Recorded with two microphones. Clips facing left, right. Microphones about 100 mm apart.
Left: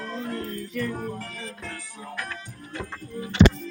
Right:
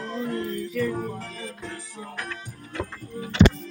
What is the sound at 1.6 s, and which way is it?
Music, 55° left (ahead or behind).